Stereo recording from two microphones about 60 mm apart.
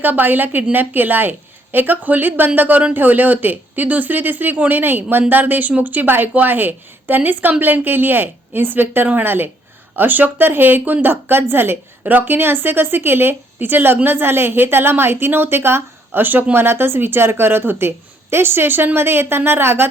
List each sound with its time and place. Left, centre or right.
0.0 s a woman's voice: right